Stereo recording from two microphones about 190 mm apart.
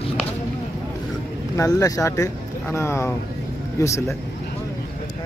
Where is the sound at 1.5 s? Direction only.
15° left (ahead or behind).